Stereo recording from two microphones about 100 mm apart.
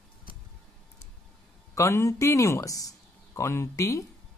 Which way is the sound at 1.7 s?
30° left (ahead or behind).